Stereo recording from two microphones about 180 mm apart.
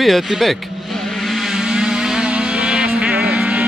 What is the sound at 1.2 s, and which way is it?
Vehicle, centre (ahead or behind).